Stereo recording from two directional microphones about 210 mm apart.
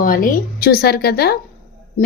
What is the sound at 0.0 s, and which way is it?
A woman's voice, 40° left (ahead or behind).